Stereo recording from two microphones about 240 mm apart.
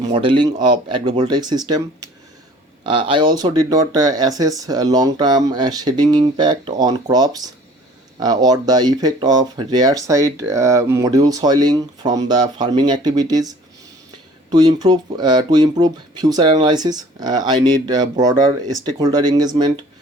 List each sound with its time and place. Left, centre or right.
0.0 s speech: right
2.8 s speech: centre